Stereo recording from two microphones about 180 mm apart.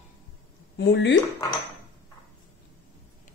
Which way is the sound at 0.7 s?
75° left (ahead or behind).